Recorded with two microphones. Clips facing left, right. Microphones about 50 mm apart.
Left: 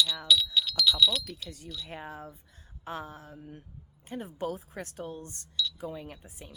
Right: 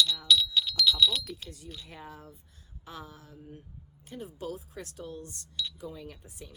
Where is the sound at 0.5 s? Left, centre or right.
Centre.